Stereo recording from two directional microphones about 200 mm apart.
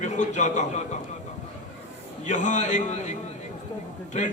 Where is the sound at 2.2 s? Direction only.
35° left (ahead or behind).